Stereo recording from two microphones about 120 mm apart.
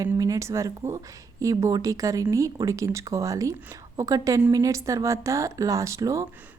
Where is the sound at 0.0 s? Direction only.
30° right (ahead or behind).